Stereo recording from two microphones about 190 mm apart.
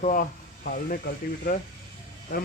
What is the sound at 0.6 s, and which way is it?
Speech, 50° left (ahead or behind).